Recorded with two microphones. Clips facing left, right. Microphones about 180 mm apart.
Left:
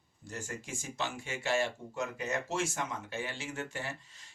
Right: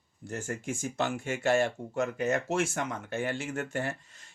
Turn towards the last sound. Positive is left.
turn(degrees=-55)  # may be behind; listen again after turning